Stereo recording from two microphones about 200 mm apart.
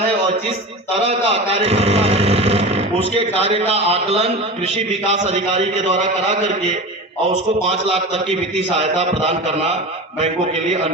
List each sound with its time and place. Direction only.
1.0 s speech: 30° right (ahead or behind)
7.7 s a man's voice: 30° right (ahead or behind)